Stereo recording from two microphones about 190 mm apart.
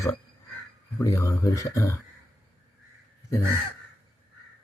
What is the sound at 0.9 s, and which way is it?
Speech, 15° left (ahead or behind).